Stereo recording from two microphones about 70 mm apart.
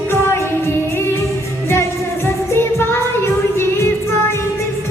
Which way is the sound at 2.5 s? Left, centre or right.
Left.